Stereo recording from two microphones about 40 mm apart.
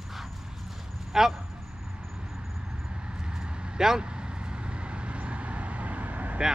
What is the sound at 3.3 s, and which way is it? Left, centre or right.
Vehicle, centre.